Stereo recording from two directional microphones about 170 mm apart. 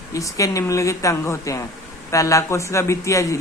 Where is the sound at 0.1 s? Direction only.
20° left (ahead or behind).